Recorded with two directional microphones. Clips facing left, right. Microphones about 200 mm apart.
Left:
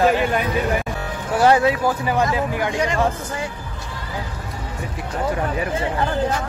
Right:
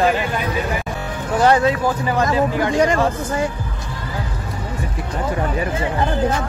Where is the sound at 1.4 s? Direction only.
10° left (ahead or behind).